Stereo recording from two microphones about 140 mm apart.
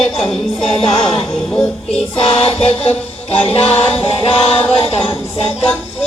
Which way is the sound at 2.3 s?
45° left (ahead or behind).